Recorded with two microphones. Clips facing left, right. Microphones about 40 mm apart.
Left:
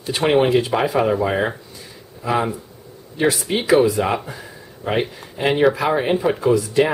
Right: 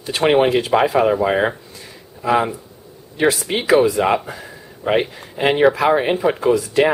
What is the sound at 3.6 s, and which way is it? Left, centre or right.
Speech, centre.